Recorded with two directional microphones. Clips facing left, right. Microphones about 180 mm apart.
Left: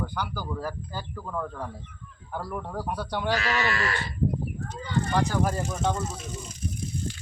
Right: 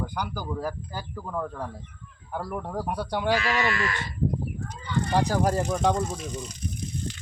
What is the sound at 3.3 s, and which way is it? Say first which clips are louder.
Speech: right 2 dB; 40° left (ahead or behind).